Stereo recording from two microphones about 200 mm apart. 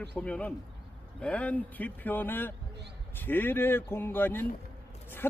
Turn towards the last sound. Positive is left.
turn(degrees=10)  # may be behind; listen again after turning